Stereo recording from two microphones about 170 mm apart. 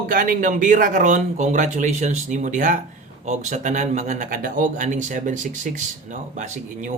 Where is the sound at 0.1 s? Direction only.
55° right (ahead or behind).